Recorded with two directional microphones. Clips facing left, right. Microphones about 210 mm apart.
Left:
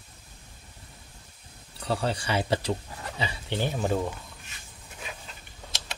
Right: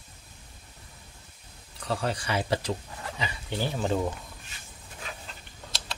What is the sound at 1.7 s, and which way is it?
Speech, 30° left (ahead or behind).